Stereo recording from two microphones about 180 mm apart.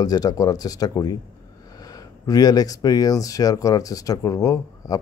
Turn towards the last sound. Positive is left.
turn(degrees=20)  # may be behind; listen again after turning